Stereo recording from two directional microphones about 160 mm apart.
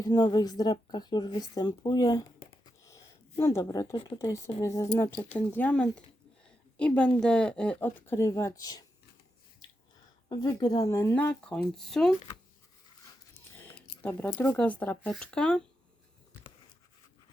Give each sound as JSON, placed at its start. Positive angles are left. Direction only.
{"t": 0.0, "sound": "speech", "side_deg": 25}
{"t": 4.2, "sound": "speech", "side_deg": 20}
{"t": 9.6, "sound": "a sound", "side_deg": 25}
{"t": 10.2, "sound": "speech", "side_deg": 25}
{"t": 14.0, "sound": "speech", "side_deg": 15}